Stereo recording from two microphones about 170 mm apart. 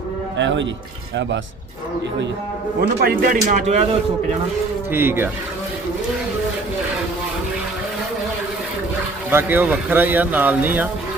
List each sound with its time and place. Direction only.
0.3 s speech: 90° right
2.8 s a man's voice: 65° right (ahead or behind)
3.5 s speech: 40° right (ahead or behind)
4.9 s speech: 15° right (ahead or behind)
9.3 s speech: 10° right (ahead or behind)